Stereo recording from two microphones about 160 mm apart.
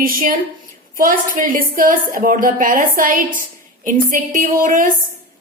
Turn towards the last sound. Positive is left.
turn(degrees=-60)  # may be behind; listen again after turning